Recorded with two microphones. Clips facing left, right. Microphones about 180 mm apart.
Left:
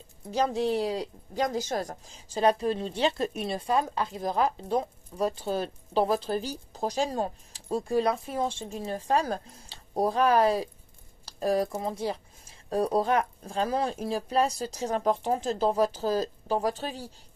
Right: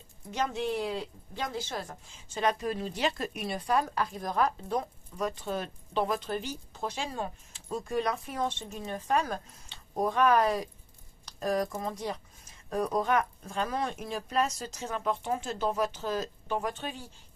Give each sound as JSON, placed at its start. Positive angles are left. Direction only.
{"t": 0.3, "sound": "speech", "side_deg": 35}